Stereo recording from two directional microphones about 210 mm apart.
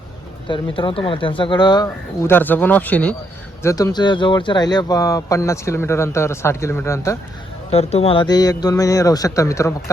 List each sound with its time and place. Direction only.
0.4 s speech: 25° left (ahead or behind)
7.7 s speech: 30° left (ahead or behind)